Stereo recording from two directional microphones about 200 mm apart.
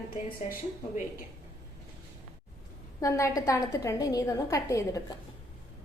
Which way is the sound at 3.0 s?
15° left (ahead or behind).